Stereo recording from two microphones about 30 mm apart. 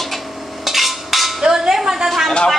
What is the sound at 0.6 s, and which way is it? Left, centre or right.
Hammer, centre.